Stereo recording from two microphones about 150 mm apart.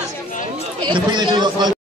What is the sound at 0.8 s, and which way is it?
Speech, 30° right (ahead or behind).